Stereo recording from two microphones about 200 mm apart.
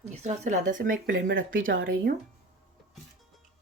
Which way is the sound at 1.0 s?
70° right (ahead or behind).